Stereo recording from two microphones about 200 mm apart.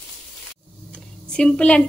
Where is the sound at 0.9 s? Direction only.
5° left (ahead or behind).